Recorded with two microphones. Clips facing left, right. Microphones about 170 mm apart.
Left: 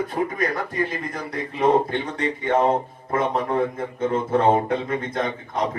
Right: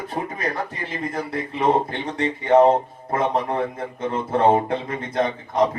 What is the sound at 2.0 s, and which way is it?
Speech, 30° right (ahead or behind).